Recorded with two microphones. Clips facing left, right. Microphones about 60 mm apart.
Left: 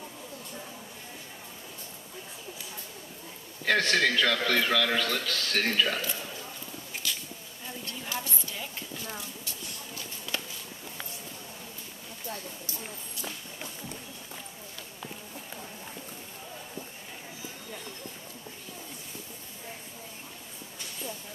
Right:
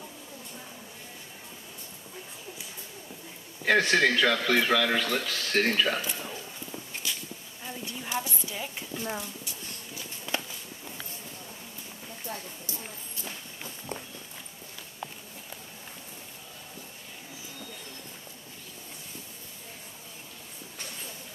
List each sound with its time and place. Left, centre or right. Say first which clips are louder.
3.6 s a man's voice: right 2 dB; centre
5.9 s a man's voice: even; right
7.0 s bee: left 1 dB; centre
7.6 s a sound: right 1 dB; centre
8.9 s speech: right 5 dB; right
10.3 s walk: right 3 dB; right